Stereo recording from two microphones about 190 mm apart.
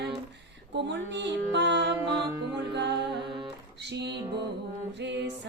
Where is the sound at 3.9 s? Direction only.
65° right (ahead or behind).